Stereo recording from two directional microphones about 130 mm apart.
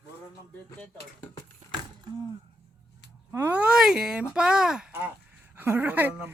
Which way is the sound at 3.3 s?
15° right (ahead or behind).